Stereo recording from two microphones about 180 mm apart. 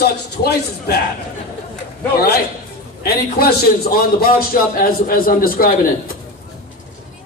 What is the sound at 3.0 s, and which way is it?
A man's voice, 60° left (ahead or behind).